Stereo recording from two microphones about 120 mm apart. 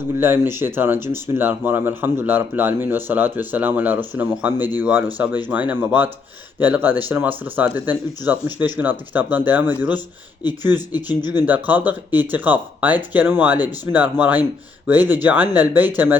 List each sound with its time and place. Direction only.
0.2 s speech: 20° right (ahead or behind)
10.8 s speech: 35° left (ahead or behind)
11.3 s speech: 15° right (ahead or behind)